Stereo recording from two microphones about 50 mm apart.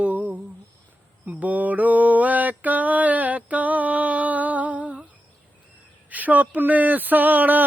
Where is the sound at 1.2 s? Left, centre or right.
Right.